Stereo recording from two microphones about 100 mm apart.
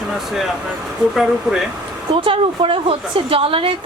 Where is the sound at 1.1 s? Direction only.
5° right (ahead or behind).